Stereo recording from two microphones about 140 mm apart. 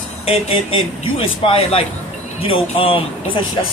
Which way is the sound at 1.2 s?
40° left (ahead or behind).